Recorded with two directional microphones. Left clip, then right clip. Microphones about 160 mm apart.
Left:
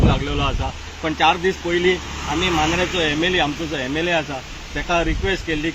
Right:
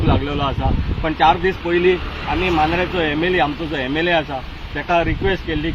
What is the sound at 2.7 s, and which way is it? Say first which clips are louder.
Speech: right 1 dB; centre (ahead or behind).